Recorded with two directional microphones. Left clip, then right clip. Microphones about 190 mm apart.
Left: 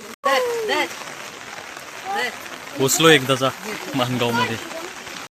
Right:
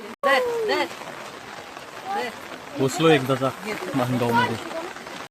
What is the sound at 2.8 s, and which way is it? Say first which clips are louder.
Speech: left 4 dB; 5° left (ahead or behind).